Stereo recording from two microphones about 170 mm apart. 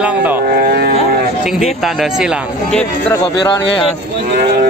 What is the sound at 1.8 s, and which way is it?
Speech, centre (ahead or behind).